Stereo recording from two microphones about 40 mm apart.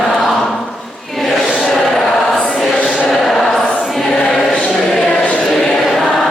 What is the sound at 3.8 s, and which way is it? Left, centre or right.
Choir, centre.